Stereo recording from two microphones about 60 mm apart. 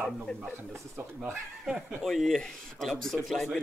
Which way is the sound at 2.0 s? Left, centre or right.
Centre.